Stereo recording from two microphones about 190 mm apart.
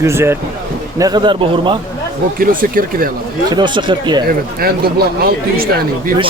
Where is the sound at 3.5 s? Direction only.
25° right (ahead or behind).